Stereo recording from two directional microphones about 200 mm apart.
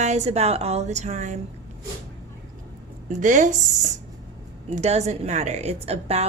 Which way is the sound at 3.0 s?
40° right (ahead or behind).